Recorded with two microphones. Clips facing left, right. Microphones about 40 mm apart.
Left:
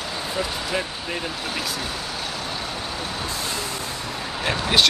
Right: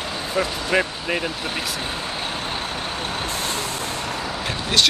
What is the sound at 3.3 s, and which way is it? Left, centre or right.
Vehicle, right.